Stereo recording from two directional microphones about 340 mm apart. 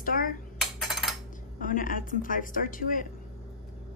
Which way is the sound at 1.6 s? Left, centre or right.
Left.